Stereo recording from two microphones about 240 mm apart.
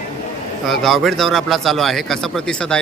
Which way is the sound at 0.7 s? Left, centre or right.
Centre.